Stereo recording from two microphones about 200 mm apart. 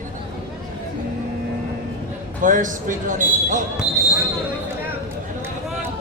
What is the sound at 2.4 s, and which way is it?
Speech, 40° right (ahead or behind).